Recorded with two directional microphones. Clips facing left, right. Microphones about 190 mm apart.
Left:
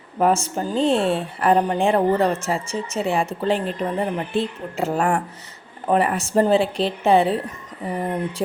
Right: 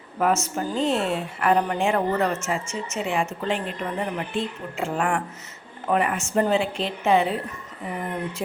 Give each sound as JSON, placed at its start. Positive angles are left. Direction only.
{"t": 0.2, "sound": "a woman's voice", "side_deg": 30}